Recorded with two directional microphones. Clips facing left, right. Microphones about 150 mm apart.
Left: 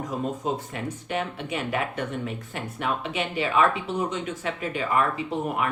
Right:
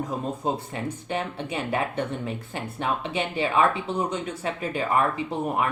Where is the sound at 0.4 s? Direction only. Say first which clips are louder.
Right 1 dB; 30° right (ahead or behind).